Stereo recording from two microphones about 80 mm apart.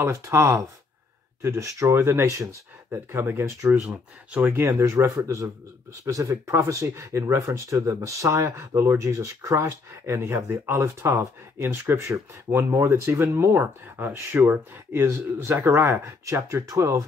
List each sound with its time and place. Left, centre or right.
0.0 s speech: right
3.8 s speech: centre
4.5 s speech: right